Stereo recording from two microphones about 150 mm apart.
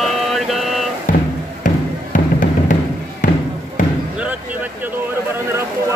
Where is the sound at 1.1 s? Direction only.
60° left (ahead or behind).